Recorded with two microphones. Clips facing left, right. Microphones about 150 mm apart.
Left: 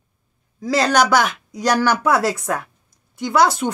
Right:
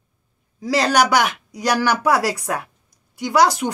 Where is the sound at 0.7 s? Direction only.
10° right (ahead or behind).